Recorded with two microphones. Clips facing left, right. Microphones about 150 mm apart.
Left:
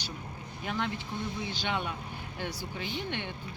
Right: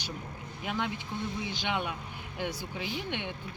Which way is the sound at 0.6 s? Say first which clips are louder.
Even; 15° right (ahead or behind).